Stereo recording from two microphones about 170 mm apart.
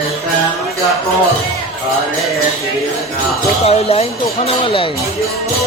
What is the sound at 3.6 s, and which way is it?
Speech, 35° left (ahead or behind).